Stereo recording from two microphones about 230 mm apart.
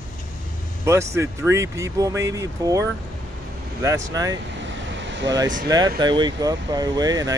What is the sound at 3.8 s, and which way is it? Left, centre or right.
Speech, centre.